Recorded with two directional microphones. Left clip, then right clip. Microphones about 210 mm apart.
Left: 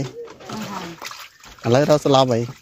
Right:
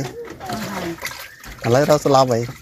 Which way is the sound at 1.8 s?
40° left (ahead or behind).